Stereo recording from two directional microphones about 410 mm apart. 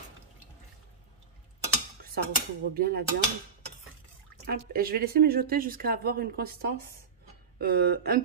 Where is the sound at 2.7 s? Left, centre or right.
Right.